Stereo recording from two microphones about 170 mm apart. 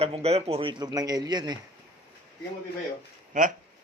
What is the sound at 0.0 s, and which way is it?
Speech, 35° right (ahead or behind).